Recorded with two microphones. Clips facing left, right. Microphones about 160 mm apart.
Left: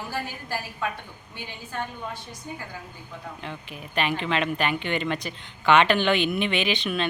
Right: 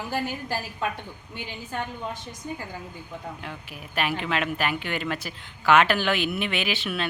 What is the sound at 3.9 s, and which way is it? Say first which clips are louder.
A woman's voice: left 1 dB; 5° right (ahead or behind).